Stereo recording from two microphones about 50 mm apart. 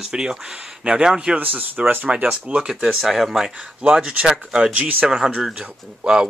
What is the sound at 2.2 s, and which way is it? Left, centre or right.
Speech, centre.